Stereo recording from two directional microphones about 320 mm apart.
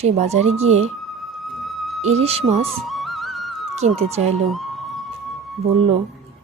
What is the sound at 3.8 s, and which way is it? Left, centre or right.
Speech, centre.